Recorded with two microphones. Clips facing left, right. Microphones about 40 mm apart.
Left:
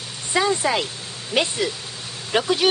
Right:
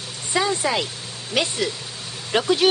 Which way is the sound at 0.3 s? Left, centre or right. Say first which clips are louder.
Left 1 dB; centre.